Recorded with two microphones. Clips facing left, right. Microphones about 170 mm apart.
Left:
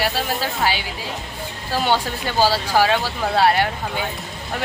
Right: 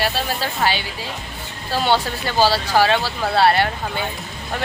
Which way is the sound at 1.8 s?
15° left (ahead or behind).